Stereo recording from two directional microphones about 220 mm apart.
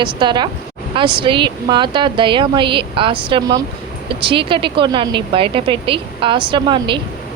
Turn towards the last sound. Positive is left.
turn(degrees=-20)  # may be behind; listen again after turning